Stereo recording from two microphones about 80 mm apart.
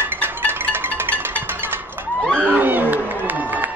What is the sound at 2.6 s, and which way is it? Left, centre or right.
Crowd, right.